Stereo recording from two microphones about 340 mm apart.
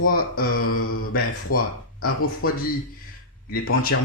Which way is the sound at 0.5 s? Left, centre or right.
Left.